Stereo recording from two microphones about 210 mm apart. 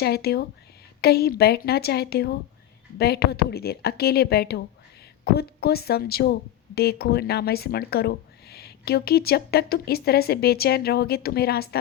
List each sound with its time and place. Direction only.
0.0 s speech: 50° left (ahead or behind)